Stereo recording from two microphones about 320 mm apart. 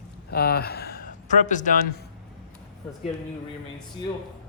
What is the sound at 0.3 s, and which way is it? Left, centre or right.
Speech, left.